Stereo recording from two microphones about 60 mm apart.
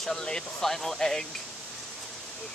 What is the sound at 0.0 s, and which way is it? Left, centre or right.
Speech, centre.